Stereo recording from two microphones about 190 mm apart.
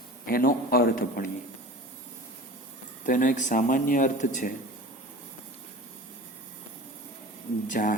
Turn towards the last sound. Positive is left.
turn(degrees=40)  # may be behind; listen again after turning